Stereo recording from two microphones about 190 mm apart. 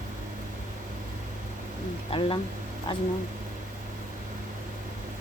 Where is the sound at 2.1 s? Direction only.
30° left (ahead or behind).